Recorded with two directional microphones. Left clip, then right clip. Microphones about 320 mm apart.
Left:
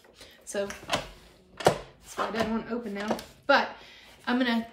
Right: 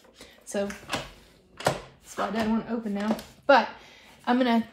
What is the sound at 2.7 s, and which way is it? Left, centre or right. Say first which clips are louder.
A woman's voice: right 1 dB; centre.